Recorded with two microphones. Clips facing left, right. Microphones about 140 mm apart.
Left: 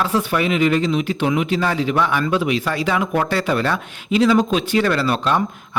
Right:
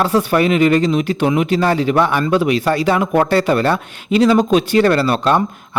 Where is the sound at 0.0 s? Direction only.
35° right (ahead or behind).